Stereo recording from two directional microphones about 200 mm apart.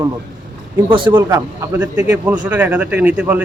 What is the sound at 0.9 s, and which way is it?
Speech, 25° right (ahead or behind).